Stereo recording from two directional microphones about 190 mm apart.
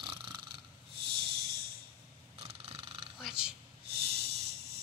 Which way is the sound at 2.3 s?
30° right (ahead or behind).